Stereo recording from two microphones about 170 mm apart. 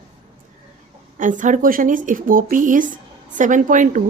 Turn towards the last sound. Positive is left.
turn(degrees=-50)  # may be behind; listen again after turning